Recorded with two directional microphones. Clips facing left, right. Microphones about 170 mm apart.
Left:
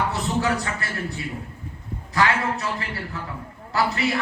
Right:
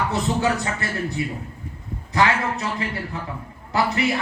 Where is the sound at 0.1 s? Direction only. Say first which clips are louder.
Right 2 dB; 20° right (ahead or behind).